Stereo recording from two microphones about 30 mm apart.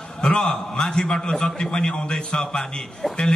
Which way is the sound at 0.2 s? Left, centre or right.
Left.